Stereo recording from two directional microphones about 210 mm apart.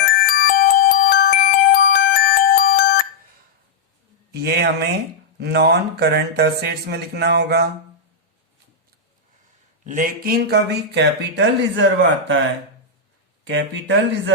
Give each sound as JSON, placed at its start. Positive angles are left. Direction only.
{"t": 0.0, "sound": "music", "side_deg": 40}
{"t": 4.3, "sound": "a man's voice", "side_deg": -50}
{"t": 9.8, "sound": "speech", "side_deg": -40}
{"t": 13.4, "sound": "speech", "side_deg": -60}